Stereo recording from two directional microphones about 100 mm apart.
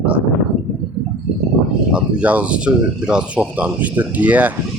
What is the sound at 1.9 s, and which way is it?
Speech, 10° right (ahead or behind).